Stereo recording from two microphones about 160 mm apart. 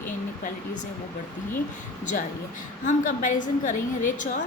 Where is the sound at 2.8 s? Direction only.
50° left (ahead or behind).